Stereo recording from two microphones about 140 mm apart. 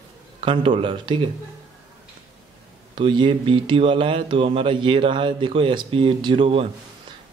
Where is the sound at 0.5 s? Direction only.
35° right (ahead or behind).